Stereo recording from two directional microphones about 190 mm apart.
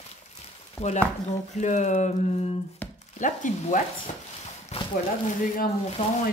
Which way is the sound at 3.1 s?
40° left (ahead or behind).